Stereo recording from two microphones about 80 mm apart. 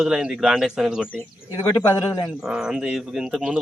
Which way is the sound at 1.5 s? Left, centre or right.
Left.